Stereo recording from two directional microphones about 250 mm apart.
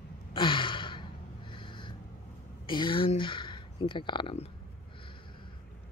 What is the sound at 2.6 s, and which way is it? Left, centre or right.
Speech, centre.